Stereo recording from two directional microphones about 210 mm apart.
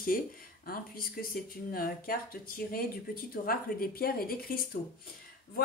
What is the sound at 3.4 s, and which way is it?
Speech, 45° left (ahead or behind).